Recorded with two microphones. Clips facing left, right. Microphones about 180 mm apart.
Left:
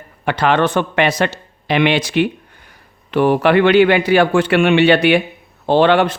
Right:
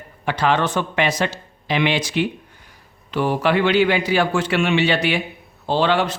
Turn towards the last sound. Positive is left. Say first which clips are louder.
# left 6 dB
turn(degrees=60)  # may be behind; listen again after turning